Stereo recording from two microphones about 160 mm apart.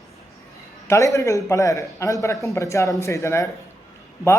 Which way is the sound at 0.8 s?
20° left (ahead or behind).